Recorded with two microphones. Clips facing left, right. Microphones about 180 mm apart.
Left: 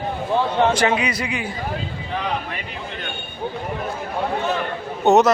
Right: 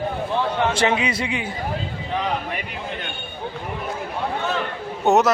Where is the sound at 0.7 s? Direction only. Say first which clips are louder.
Left 1 dB; 25° right (ahead or behind).